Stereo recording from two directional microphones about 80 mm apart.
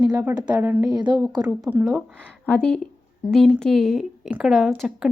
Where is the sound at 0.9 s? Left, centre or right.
Right.